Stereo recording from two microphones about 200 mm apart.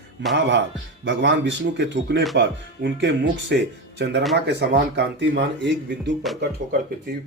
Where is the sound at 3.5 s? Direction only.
60° right (ahead or behind).